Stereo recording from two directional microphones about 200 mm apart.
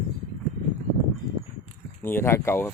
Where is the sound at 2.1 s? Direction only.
10° left (ahead or behind).